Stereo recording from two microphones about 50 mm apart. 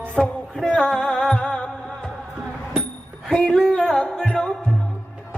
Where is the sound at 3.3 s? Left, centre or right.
Centre.